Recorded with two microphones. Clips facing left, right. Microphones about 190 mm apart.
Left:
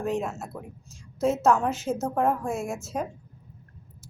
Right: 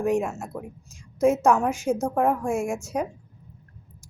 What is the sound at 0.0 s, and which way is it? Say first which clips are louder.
A woman's voice: right 4 dB; 10° right (ahead or behind).